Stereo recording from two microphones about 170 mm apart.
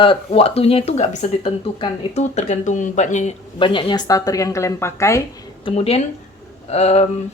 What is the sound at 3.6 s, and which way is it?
A woman's voice, 30° left (ahead or behind).